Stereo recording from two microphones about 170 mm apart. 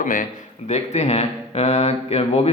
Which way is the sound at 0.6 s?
40° left (ahead or behind).